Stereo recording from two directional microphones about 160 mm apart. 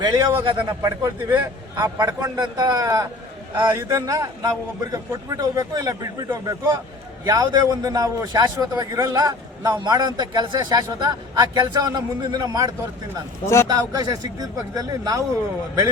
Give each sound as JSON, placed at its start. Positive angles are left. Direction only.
{"t": 0.0, "sound": "a man's voice", "side_deg": -25}
{"t": 13.4, "sound": "a man's voice", "side_deg": 15}
{"t": 13.7, "sound": "a man's voice", "side_deg": -25}